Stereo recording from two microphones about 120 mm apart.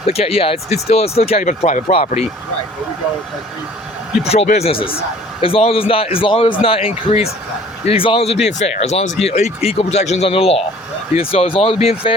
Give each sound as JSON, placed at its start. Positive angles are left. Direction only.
{"t": 0.1, "sound": "speech", "side_deg": 55}
{"t": 1.5, "sound": "speech", "side_deg": 85}
{"t": 4.2, "sound": "a man's voice", "side_deg": 65}